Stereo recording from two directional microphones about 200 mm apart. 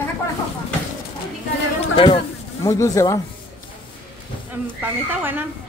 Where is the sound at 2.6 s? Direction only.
15° left (ahead or behind).